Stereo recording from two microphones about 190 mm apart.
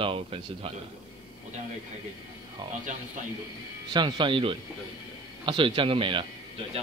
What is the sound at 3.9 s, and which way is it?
Speech, 25° right (ahead or behind).